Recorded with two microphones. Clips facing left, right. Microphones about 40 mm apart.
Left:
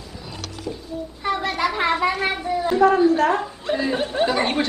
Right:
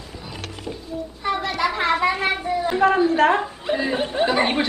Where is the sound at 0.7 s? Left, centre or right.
Right.